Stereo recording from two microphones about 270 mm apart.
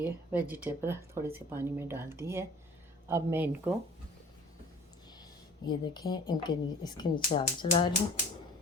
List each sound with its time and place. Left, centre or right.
0.0 s speech: centre
5.6 s speech: centre